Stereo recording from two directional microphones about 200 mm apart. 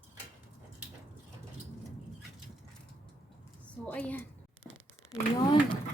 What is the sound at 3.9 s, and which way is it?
Speech, 10° left (ahead or behind).